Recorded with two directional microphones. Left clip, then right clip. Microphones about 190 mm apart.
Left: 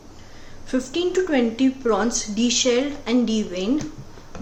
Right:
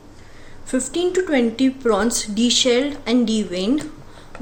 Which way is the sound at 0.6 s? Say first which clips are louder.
Right 2 dB; 15° right (ahead or behind).